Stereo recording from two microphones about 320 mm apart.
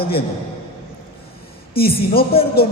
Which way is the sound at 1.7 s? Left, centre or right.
Left.